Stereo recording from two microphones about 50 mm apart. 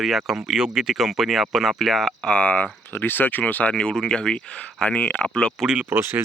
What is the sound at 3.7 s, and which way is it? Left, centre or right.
Speech, centre.